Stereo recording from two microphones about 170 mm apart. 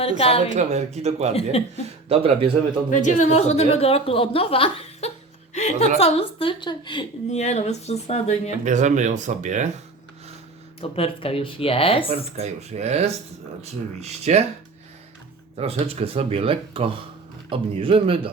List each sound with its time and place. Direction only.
0.0 s a woman's voice: 35° left (ahead or behind)
0.5 s speech: 40° right (ahead or behind)
2.9 s a woman's voice: 45° left (ahead or behind); by 7.1 s 30° left (ahead or behind)
7.3 s a woman's voice: 40° left (ahead or behind)
8.6 s speech: 45° right (ahead or behind)
10.8 s a woman's voice: 35° left (ahead or behind)
12.4 s speech: 40° right (ahead or behind)
15.5 s speech: 35° right (ahead or behind)